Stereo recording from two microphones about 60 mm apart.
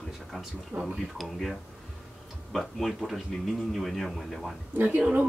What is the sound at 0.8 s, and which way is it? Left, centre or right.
Speech, centre.